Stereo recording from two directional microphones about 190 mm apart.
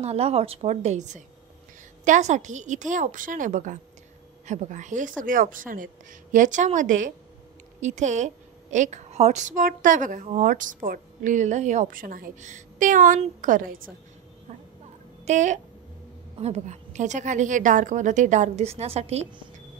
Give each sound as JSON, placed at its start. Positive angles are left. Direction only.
{"t": 0.0, "sound": "a woman's voice", "side_deg": -35}
{"t": 15.2, "sound": "a woman's voice", "side_deg": -40}